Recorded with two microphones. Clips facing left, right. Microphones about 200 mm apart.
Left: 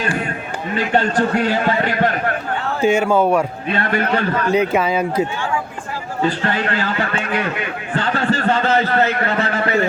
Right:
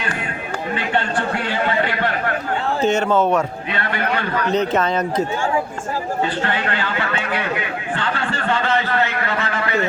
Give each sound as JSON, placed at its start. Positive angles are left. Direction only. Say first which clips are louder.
{"t": 0.8, "sound": "a man's voice", "louder": "left 6 dB", "side_deg": 40}
{"t": 2.8, "sound": "speech", "louder": "left 3 dB", "side_deg": 10}
{"t": 4.0, "sound": "a man's voice", "louder": "left 3 dB", "side_deg": 30}
{"t": 4.5, "sound": "speech", "louder": "left 1 dB", "side_deg": 10}
{"t": 6.2, "sound": "a man's voice", "louder": "left 3 dB", "side_deg": 40}
{"t": 7.9, "sound": "a sound", "louder": "left 7 dB", "side_deg": 40}